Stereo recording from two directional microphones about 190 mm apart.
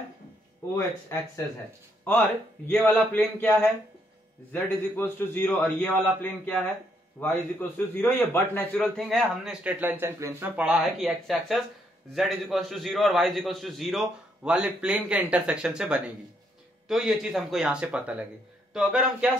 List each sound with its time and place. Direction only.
0.7 s a man's voice: 15° left (ahead or behind)
2.7 s a man's voice: 10° left (ahead or behind)